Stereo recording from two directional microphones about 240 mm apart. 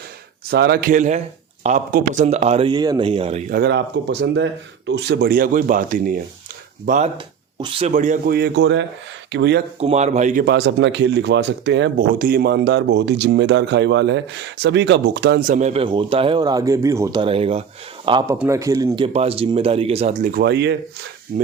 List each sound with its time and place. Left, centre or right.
0.5 s speech: right
3.5 s speech: right
9.8 s speech: right